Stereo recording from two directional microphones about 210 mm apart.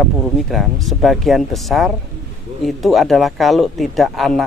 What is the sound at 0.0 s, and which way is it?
Speech, centre (ahead or behind).